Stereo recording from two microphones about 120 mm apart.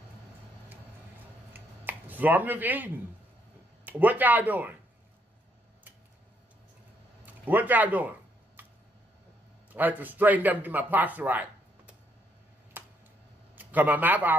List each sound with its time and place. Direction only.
1.5 s finger snapping: 15° right (ahead or behind)
3.8 s speech: 15° right (ahead or behind)
7.2 s speech: 15° right (ahead or behind)
8.6 s a sound: 15° right (ahead or behind)
9.7 s a man's voice: 15° right (ahead or behind)
12.7 s a sound: 15° right (ahead or behind)
13.6 s a man's voice: 15° right (ahead or behind)